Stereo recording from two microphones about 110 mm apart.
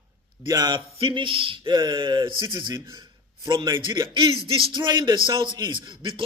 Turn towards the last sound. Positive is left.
turn(degrees=-50)  # may be behind; listen again after turning